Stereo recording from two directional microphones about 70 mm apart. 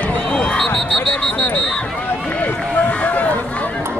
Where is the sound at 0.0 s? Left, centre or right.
Centre.